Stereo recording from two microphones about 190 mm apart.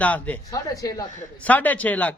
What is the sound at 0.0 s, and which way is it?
Speech, 10° left (ahead or behind).